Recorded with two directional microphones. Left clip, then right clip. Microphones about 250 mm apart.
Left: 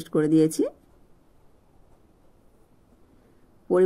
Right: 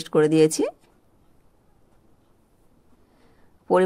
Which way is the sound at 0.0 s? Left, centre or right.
Right.